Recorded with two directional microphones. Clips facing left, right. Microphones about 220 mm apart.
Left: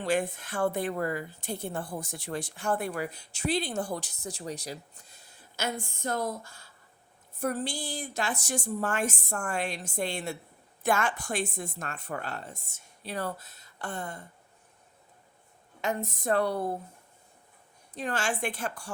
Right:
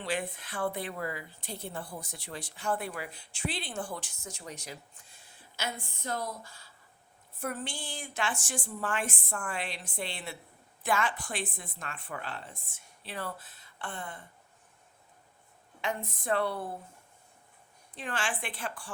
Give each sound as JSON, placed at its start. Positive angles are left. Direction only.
{"t": 0.0, "sound": "a woman's voice", "side_deg": 45}
{"t": 7.3, "sound": "a woman's voice", "side_deg": 40}
{"t": 15.8, "sound": "speech", "side_deg": 40}
{"t": 17.9, "sound": "speech", "side_deg": 40}